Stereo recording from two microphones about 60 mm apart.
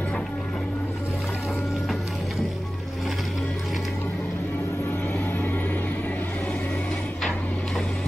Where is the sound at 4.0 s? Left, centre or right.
Left.